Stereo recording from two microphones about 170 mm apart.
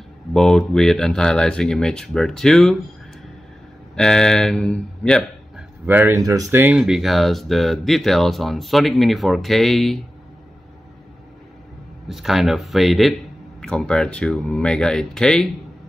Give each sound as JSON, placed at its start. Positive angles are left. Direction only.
{"t": 0.3, "sound": "speech", "side_deg": 0}
{"t": 3.9, "sound": "speech", "side_deg": 5}
{"t": 5.9, "sound": "speech", "side_deg": -10}
{"t": 12.1, "sound": "speech", "side_deg": 0}